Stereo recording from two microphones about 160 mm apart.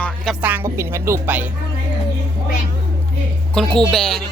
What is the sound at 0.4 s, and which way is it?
A woman's voice, 15° right (ahead or behind).